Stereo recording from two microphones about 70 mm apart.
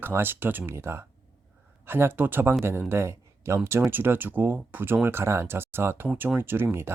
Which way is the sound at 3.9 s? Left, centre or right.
Right.